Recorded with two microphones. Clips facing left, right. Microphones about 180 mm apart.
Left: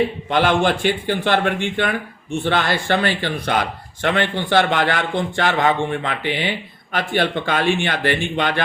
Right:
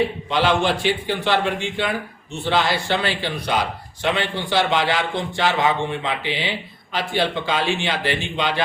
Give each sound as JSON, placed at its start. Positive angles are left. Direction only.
{"t": 0.3, "sound": "a man's voice", "side_deg": 55}